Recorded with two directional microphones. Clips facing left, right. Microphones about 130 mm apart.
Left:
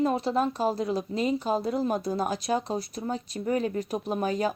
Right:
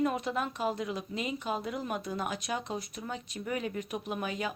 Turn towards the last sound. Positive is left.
turn(degrees=40)  # may be behind; listen again after turning